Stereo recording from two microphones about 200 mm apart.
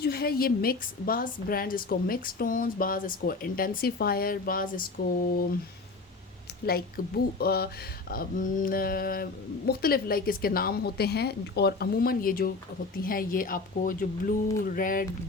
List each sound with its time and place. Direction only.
0.0 s a woman's voice: 50° left (ahead or behind)
6.7 s a woman's voice: 50° left (ahead or behind)